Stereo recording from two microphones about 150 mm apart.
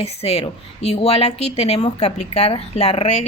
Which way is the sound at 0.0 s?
40° left (ahead or behind).